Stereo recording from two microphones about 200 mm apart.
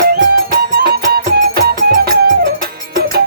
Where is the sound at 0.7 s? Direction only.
50° right (ahead or behind).